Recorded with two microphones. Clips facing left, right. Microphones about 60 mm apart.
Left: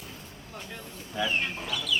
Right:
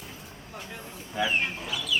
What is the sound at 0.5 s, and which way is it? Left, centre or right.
Speech, centre.